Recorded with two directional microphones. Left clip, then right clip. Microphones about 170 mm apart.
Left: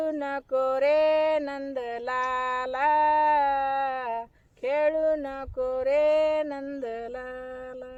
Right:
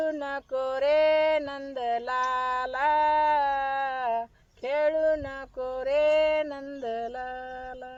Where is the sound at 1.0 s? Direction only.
40° left (ahead or behind).